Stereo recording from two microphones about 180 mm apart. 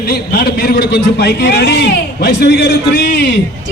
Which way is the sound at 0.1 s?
55° left (ahead or behind).